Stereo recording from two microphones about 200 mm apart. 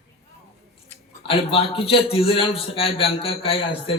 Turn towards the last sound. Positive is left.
turn(degrees=30)  # may be behind; listen again after turning